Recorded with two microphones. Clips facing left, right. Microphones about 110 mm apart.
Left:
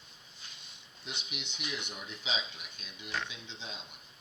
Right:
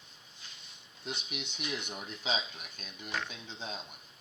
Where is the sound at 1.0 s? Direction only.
45° right (ahead or behind).